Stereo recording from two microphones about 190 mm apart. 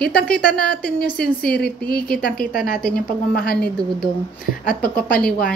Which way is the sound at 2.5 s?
45° left (ahead or behind).